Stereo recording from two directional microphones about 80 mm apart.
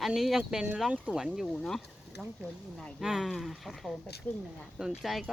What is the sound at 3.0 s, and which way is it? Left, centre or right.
Speech, centre.